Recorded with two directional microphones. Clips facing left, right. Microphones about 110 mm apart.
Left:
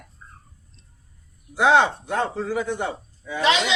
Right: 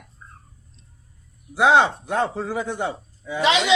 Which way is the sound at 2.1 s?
20° right (ahead or behind).